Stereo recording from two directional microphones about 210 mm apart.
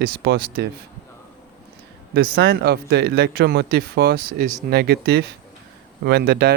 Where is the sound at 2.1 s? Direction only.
50° right (ahead or behind).